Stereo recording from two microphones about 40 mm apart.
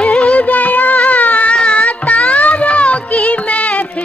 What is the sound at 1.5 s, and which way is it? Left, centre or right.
Music, centre.